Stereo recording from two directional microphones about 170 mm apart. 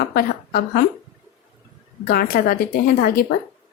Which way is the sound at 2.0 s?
60° left (ahead or behind).